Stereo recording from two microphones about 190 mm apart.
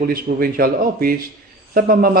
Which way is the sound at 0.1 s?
50° right (ahead or behind).